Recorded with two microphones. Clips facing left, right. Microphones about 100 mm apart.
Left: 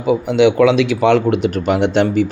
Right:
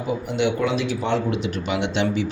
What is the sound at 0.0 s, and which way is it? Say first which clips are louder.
Speech: left 10 dB; 90° left.